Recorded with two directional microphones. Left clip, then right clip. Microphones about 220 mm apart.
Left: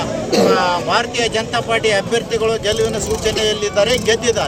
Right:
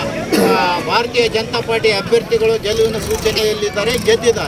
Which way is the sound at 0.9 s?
25° left (ahead or behind).